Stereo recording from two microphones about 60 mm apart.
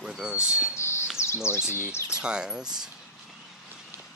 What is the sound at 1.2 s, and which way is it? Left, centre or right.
Speech, left.